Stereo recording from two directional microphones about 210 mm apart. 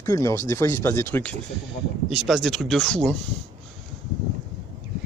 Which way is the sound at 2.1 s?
Centre (ahead or behind).